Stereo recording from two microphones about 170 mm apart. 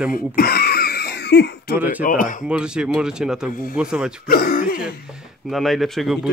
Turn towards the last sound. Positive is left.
turn(degrees=0)  # may be behind; listen again after turning